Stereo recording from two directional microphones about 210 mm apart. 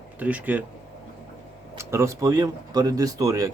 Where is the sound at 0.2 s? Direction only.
5° right (ahead or behind).